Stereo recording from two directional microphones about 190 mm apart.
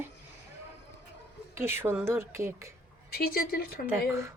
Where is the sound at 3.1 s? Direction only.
50° left (ahead or behind).